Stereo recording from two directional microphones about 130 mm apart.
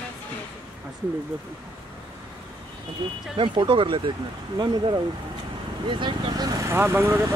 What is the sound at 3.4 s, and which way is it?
Speech, 40° right (ahead or behind).